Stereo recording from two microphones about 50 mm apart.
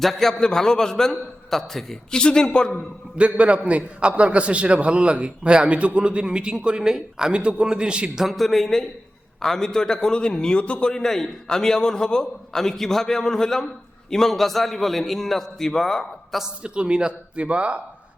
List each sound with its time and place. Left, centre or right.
0.0 s a man's voice: centre
3.2 s a man's voice: right
8.2 s a man's voice: centre
16.6 s a man's voice: right